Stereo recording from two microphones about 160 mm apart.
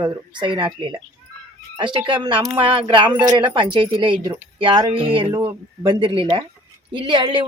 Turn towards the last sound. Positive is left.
turn(degrees=-30)  # may be behind; listen again after turning